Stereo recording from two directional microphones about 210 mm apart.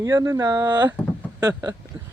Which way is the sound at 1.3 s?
15° right (ahead or behind).